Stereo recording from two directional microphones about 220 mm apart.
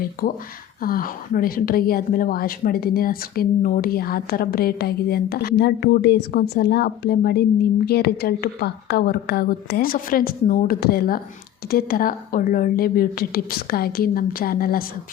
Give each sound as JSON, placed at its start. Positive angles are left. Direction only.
{"t": 0.0, "sound": "a woman's voice", "side_deg": 40}